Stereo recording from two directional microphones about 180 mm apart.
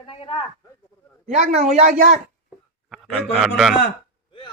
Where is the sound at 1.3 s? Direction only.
40° right (ahead or behind).